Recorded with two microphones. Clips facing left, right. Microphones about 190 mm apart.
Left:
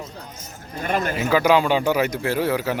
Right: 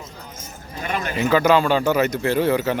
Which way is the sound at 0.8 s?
45° left (ahead or behind).